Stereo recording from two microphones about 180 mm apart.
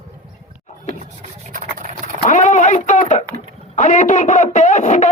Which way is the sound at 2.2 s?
40° left (ahead or behind).